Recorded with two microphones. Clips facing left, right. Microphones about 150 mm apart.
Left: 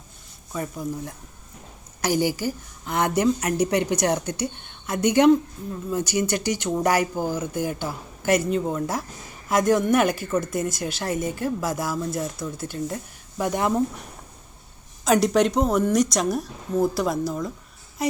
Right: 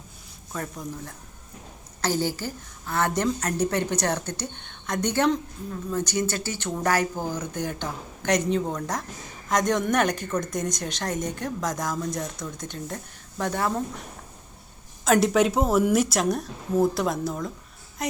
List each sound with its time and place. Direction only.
0.5 s a woman's voice: 10° left (ahead or behind)
15.0 s speech: centre (ahead or behind)